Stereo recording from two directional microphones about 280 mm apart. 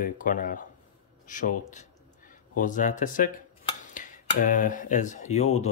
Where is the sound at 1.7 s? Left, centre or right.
Left.